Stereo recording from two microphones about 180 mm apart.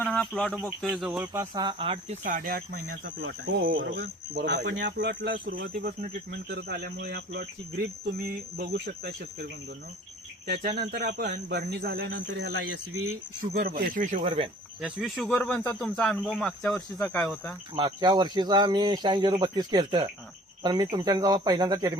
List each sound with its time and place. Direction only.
0.0 s speech: 5° left (ahead or behind); by 2.1 s 30° right (ahead or behind)
2.2 s speech: 50° right (ahead or behind)
3.2 s speech: 85° right
3.6 s speech: 50° right (ahead or behind)
13.5 s speech: 50° right (ahead or behind)
14.3 s speech: 30° right (ahead or behind)
14.8 s speech: 5° right (ahead or behind)
17.7 s speech: 25° right (ahead or behind)